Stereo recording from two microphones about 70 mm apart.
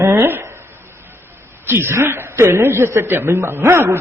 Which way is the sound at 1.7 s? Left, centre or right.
Right.